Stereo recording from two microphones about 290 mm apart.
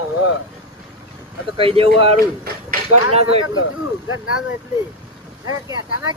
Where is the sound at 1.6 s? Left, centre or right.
Centre.